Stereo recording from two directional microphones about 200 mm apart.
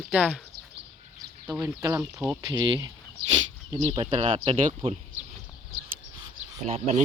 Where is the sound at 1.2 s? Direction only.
15° right (ahead or behind).